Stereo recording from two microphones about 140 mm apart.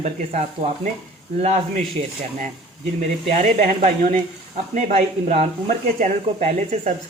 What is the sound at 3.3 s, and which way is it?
Speech, 55° right (ahead or behind).